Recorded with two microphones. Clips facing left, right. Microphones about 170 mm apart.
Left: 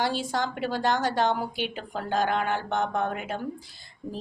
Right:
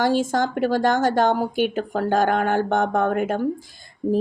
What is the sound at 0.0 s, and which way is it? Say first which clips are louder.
Speech: right 7 dB; 45° right (ahead or behind).